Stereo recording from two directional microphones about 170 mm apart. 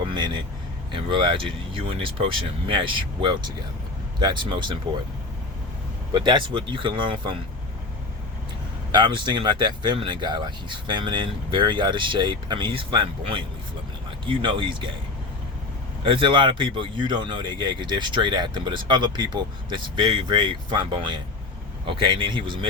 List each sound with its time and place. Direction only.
0.9 s speech: 30° right (ahead or behind)
6.1 s speech: 25° right (ahead or behind)
8.9 s speech: 25° right (ahead or behind)
16.0 s speech: 30° right (ahead or behind)